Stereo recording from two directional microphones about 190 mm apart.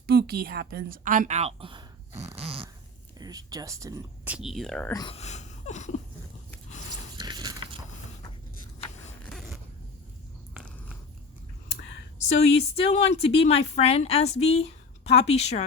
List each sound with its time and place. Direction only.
0.1 s a woman's voice: 55° right (ahead or behind); by 2.6 s 30° right (ahead or behind)
3.2 s speech: 20° right (ahead or behind)
4.4 s speech: centre (ahead or behind)
4.9 s speech: 20° left (ahead or behind)
5.1 s a sound: 35° left (ahead or behind)
7.2 s a sound: 25° right (ahead or behind)
9.2 s zipper: centre (ahead or behind)
10.5 s cat: 5° right (ahead or behind)
12.5 s speech: 30° left (ahead or behind)